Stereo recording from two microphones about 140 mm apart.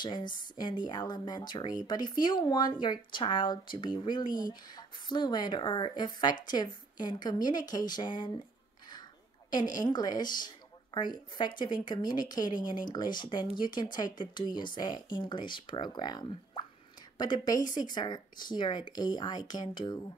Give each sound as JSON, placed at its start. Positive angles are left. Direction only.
{"t": 0.0, "sound": "speech", "side_deg": 30}
{"t": 9.5, "sound": "a woman's voice", "side_deg": 30}